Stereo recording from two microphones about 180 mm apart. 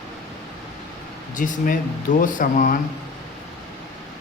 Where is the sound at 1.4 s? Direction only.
45° left (ahead or behind).